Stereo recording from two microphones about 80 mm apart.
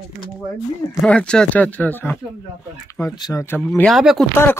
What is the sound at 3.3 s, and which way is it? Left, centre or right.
Speech, centre.